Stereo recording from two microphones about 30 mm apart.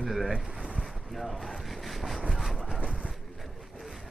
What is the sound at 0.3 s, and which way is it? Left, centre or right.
Speech, right.